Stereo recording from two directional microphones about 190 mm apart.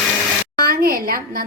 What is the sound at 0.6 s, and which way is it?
Speech, 50° right (ahead or behind).